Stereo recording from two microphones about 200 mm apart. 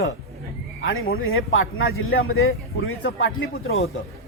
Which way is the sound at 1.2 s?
90° left.